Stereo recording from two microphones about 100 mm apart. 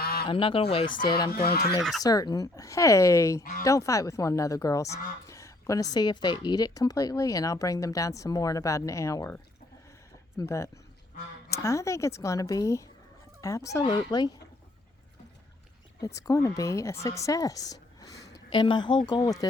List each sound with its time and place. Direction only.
0.3 s speech: 60° left (ahead or behind)
2.0 s speech: 40° left (ahead or behind)
10.3 s speech: 30° left (ahead or behind)
13.9 s speech: 45° left (ahead or behind)
16.0 s a woman's voice: 35° left (ahead or behind)
18.5 s speech: 50° left (ahead or behind)